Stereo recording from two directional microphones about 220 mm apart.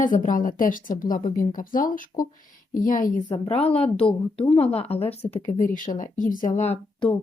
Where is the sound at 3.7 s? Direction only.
25° left (ahead or behind).